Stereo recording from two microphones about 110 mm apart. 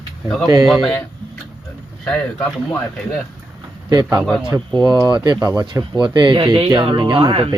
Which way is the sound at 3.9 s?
40° right (ahead or behind).